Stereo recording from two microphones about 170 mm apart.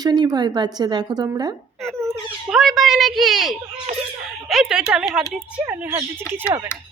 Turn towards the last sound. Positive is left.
turn(degrees=-10)  # may be behind; listen again after turning